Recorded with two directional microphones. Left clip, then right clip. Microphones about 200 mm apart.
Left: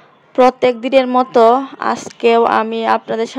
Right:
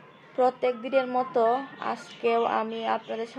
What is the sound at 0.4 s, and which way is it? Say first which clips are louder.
A woman's voice: left 13 dB; 50° left (ahead or behind).